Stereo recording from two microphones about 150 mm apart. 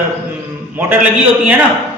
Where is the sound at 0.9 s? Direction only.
10° right (ahead or behind).